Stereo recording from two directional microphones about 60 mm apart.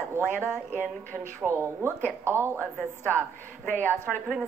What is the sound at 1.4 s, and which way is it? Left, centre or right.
Speech, right.